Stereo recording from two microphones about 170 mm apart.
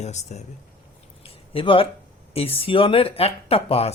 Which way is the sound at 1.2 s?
30° left (ahead or behind).